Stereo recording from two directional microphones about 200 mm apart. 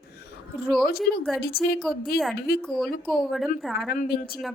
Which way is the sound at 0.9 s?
50° left (ahead or behind).